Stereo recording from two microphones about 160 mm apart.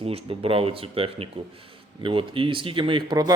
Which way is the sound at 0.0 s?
40° right (ahead or behind).